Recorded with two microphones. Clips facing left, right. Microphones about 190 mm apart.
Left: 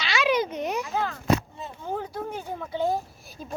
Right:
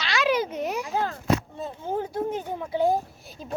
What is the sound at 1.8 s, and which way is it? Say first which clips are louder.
Speech: right 4 dB; 25° right (ahead or behind).